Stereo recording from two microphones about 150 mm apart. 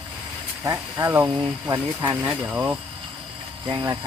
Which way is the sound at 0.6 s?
20° right (ahead or behind).